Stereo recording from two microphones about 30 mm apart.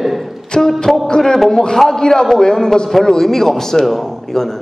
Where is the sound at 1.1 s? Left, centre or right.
Left.